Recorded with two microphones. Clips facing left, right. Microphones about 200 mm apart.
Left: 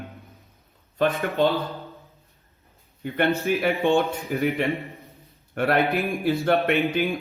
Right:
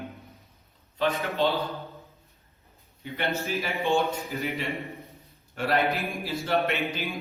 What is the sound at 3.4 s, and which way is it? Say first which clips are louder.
Speech: left 6 dB; 55° left (ahead or behind).